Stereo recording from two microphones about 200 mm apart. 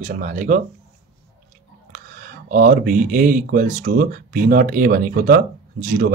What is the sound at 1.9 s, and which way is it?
Speech, 45° right (ahead or behind).